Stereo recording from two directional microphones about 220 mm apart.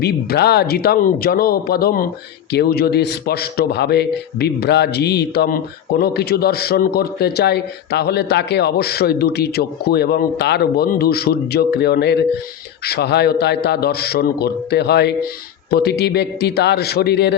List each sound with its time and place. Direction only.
0.0 s a man's voice: 45° left (ahead or behind)